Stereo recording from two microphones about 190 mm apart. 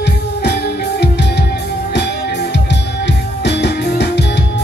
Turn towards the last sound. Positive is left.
turn(degrees=65)  # may be behind; listen again after turning